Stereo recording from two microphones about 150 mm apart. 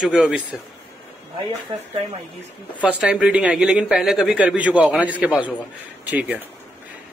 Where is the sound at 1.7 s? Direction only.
35° right (ahead or behind).